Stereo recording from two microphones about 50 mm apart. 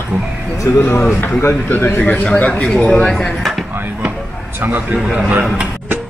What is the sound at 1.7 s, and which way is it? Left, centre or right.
Speech, left.